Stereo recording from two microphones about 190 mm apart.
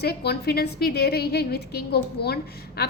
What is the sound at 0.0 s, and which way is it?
A woman's voice, 55° left (ahead or behind).